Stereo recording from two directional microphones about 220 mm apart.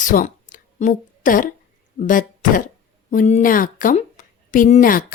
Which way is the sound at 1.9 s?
35° left (ahead or behind).